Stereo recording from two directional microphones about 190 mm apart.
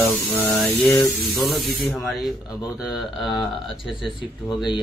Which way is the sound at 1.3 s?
Centre (ahead or behind).